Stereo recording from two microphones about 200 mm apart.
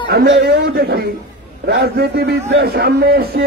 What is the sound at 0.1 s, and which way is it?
A man's voice, 50° right (ahead or behind).